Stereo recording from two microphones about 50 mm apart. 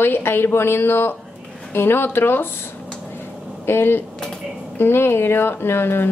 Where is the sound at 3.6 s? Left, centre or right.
Left.